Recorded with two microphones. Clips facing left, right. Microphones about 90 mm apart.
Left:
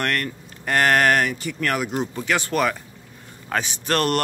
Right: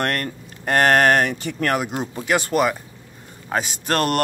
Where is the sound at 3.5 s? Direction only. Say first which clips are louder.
Right 1 dB; 30° right (ahead or behind).